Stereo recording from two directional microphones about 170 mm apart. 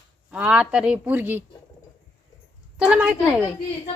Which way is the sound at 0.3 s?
5° right (ahead or behind).